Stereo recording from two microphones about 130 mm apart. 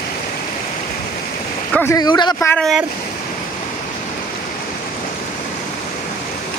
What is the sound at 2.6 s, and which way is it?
Speech, centre (ahead or behind).